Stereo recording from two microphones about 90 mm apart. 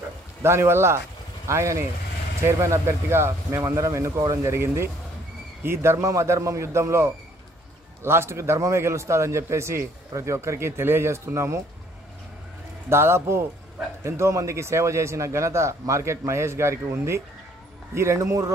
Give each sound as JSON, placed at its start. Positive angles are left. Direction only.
{"t": 0.4, "sound": "speech", "side_deg": -30}
{"t": 12.9, "sound": "speech", "side_deg": -30}